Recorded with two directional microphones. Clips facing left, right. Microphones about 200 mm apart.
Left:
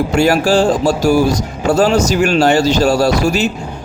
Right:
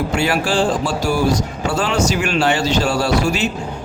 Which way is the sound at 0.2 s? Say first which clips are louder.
Left 7 dB; 40° left (ahead or behind).